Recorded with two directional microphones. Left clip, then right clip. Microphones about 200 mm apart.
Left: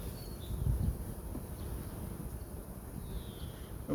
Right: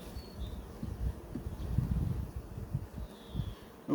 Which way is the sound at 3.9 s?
Centre (ahead or behind).